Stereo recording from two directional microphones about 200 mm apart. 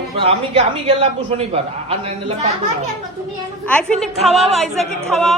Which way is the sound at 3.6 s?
5° left (ahead or behind).